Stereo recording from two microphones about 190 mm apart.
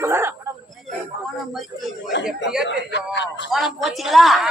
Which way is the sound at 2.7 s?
70° left (ahead or behind).